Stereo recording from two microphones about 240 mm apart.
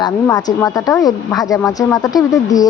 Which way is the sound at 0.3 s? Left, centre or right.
Centre.